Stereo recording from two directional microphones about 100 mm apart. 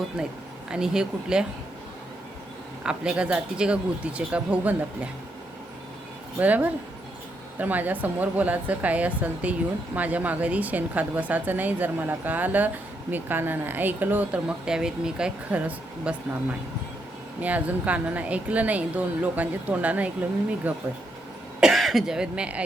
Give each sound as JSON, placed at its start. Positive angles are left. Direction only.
{"t": 0.2, "sound": "a woman's voice", "side_deg": -10}
{"t": 2.8, "sound": "a woman's voice", "side_deg": -10}
{"t": 6.4, "sound": "a woman's voice", "side_deg": -15}
{"t": 21.6, "sound": "a woman's voice", "side_deg": 0}